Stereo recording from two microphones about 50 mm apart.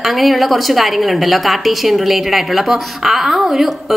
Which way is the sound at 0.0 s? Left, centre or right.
Centre.